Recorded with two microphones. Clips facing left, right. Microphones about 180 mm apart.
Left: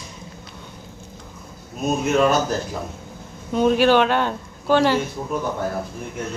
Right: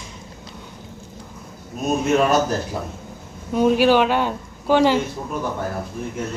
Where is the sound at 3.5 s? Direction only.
10° right (ahead or behind).